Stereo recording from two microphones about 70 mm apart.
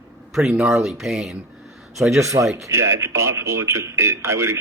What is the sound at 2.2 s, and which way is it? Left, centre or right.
Speech, right.